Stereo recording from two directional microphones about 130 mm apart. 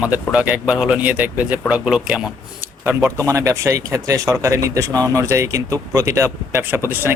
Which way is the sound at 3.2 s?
25° right (ahead or behind).